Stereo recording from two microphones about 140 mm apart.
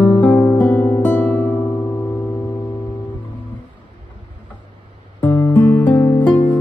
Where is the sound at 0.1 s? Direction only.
15° left (ahead or behind).